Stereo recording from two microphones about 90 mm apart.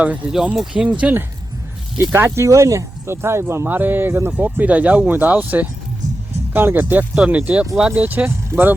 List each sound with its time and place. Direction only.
0.0 s speech: 15° right (ahead or behind)
2.1 s speech: 30° right (ahead or behind); by 8.0 s 10° right (ahead or behind)
8.0 s speech: 20° right (ahead or behind)